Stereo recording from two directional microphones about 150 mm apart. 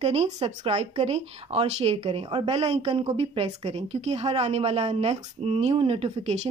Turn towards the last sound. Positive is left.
turn(degrees=-40)  # may be behind; listen again after turning